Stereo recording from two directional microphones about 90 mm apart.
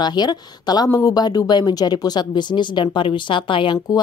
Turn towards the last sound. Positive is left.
turn(degrees=70)  # may be behind; listen again after turning